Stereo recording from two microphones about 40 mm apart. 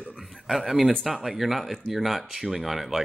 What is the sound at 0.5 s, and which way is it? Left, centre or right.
Speech, centre.